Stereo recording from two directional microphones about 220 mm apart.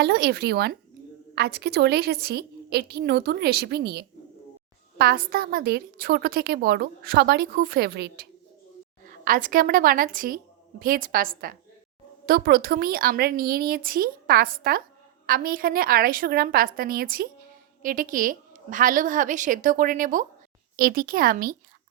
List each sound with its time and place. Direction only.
0.0 s a woman's voice: 45° right (ahead or behind)